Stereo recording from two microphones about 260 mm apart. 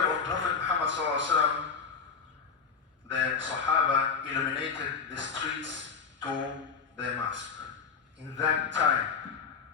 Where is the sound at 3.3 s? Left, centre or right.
Right.